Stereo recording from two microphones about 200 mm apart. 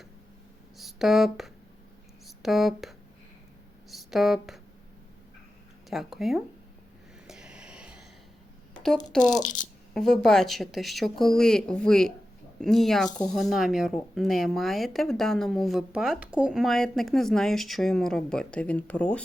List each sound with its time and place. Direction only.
0.8 s speech: centre (ahead or behind)
5.9 s speech: centre (ahead or behind)
7.3 s a sound: 5° right (ahead or behind)
9.1 s speech: 5° left (ahead or behind)
9.4 s speech: 40° left (ahead or behind)
9.9 s speech: 5° left (ahead or behind)